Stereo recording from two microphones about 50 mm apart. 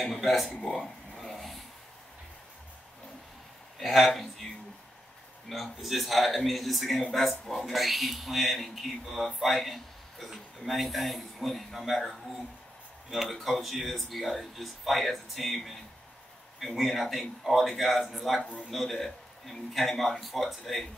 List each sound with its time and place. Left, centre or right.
0.0 s speech: centre
0.7 s a sound: centre
3.8 s speech: centre
5.5 s speech: centre
18.4 s a man's voice: centre
18.7 s speech: centre